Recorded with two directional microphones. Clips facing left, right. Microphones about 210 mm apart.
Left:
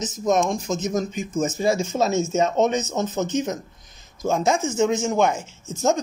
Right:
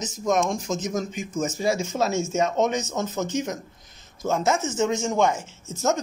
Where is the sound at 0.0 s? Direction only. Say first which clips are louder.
Left 2 dB; 20° left (ahead or behind).